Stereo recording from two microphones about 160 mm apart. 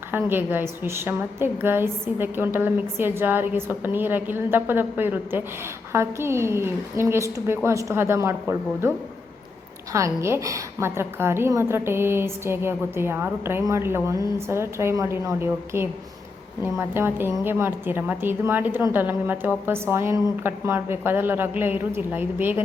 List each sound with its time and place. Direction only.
0.1 s a woman's voice: 10° right (ahead or behind)
9.9 s a woman's voice: 15° right (ahead or behind)